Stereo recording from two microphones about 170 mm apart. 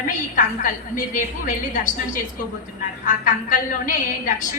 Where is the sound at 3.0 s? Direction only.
50° left (ahead or behind).